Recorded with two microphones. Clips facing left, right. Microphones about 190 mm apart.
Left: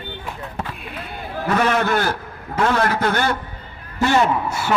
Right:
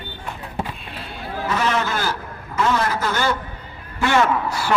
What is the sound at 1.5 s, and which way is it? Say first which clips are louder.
A man's voice: left 4 dB; 55° left (ahead or behind).